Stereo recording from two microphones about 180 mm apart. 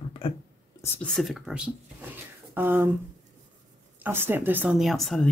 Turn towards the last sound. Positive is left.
turn(degrees=0)  # may be behind; listen again after turning